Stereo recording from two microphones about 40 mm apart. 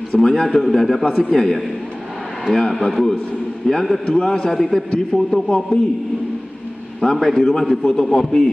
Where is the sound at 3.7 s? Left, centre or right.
Centre.